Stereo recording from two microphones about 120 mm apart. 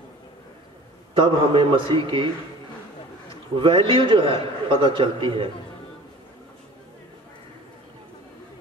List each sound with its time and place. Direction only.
1.1 s a man's voice: 45° right (ahead or behind)
3.5 s a man's voice: 45° right (ahead or behind)